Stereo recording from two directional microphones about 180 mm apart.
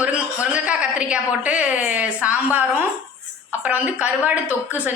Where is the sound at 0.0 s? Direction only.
10° right (ahead or behind).